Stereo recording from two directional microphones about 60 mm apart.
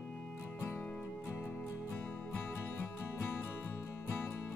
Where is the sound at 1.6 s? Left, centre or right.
Left.